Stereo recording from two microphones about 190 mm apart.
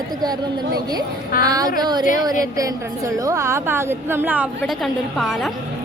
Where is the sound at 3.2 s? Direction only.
15° right (ahead or behind).